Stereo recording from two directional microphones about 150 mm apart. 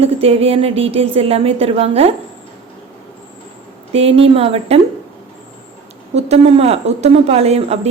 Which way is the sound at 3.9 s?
40° right (ahead or behind).